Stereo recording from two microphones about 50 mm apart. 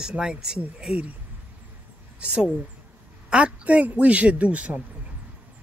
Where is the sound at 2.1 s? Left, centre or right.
Centre.